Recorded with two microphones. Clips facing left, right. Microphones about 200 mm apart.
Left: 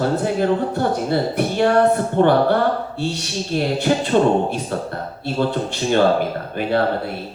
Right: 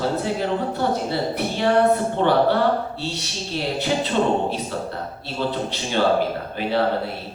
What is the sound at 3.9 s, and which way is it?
Speech, 55° left (ahead or behind).